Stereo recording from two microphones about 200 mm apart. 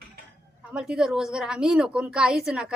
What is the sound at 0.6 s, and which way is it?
A woman's voice, 5° right (ahead or behind).